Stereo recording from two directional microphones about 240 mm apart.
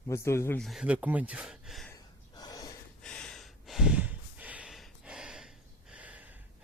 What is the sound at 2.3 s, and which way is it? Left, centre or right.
Gasp, centre.